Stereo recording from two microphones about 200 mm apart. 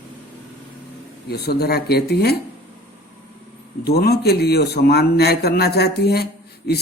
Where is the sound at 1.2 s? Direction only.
50° left (ahead or behind).